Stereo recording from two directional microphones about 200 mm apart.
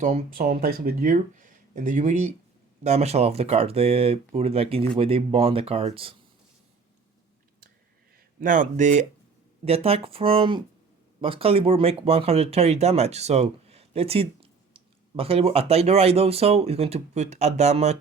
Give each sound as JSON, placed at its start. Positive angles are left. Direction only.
{"t": 0.0, "sound": "speech", "side_deg": -40}
{"t": 8.4, "sound": "speech", "side_deg": -40}